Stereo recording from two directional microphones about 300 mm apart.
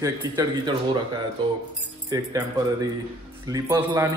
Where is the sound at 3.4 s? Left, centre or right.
Centre.